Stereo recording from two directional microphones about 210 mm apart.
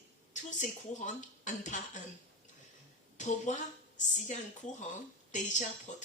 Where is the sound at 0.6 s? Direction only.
35° left (ahead or behind).